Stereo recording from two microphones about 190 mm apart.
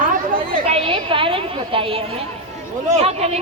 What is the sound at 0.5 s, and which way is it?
Chatter, 25° right (ahead or behind).